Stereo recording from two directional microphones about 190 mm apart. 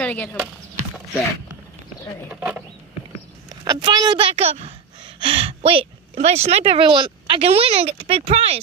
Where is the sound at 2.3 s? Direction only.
5° right (ahead or behind).